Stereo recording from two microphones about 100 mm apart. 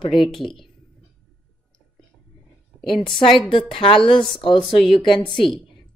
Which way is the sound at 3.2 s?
60° left (ahead or behind).